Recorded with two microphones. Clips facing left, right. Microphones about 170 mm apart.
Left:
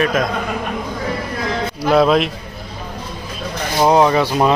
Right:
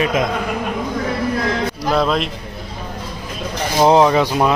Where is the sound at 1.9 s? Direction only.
5° left (ahead or behind).